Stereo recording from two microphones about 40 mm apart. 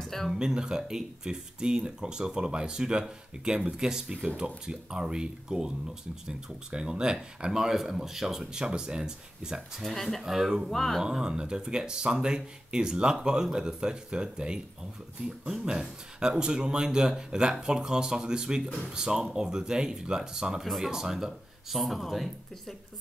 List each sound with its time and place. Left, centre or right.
0.0 s a sound: centre
0.3 s speech: centre
9.8 s speech: centre
10.2 s speech: centre
10.7 s speech: centre
11.1 s speech: right
15.8 s speech: centre
20.6 s speech: centre